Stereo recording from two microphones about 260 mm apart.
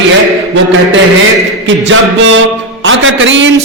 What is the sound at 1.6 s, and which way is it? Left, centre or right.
A man's voice, right.